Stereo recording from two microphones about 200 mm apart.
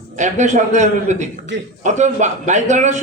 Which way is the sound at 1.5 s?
60° right (ahead or behind).